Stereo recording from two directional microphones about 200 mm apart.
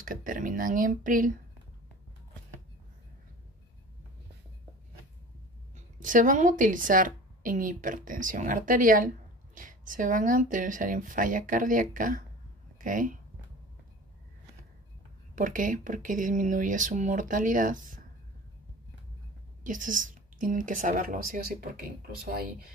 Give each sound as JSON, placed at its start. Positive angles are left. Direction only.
{"t": 0.0, "sound": "speech", "side_deg": -45}
{"t": 5.9, "sound": "a woman's voice", "side_deg": -40}
{"t": 15.3, "sound": "a woman's voice", "side_deg": -40}
{"t": 19.6, "sound": "a woman's voice", "side_deg": -40}